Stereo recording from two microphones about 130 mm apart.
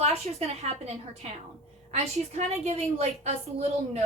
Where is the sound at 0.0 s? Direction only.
55° right (ahead or behind).